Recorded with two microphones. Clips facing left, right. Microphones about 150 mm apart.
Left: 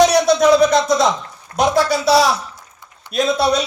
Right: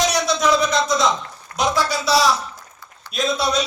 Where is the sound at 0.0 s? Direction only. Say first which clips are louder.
Left 7 dB; 60° left (ahead or behind).